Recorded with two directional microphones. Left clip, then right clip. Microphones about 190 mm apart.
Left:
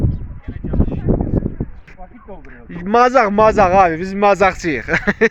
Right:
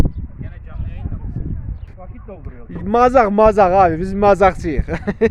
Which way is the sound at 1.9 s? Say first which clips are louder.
Left 1 dB; centre (ahead or behind).